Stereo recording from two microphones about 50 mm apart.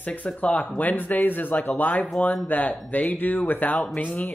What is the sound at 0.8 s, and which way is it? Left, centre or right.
Speech, left.